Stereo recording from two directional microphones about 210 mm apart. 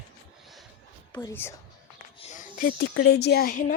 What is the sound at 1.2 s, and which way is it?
Speech, 10° left (ahead or behind).